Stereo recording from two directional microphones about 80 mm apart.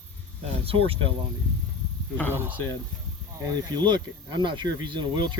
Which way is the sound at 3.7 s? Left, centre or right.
Right.